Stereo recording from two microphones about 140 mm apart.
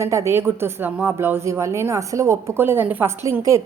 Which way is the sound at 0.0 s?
20° right (ahead or behind).